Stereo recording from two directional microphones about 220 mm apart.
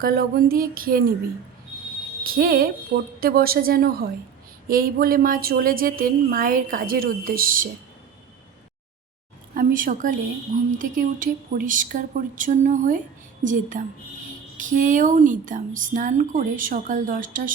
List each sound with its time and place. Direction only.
0.0 s a woman's voice: 40° right (ahead or behind)
2.2 s a woman's voice: 40° right (ahead or behind)
9.6 s a woman's voice: 40° right (ahead or behind)